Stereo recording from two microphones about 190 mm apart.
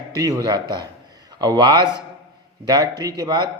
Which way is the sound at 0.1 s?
20° right (ahead or behind).